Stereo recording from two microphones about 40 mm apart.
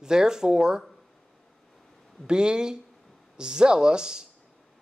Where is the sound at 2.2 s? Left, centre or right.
Right.